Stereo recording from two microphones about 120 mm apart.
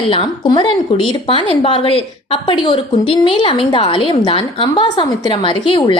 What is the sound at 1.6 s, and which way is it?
A woman's voice, 50° left (ahead or behind).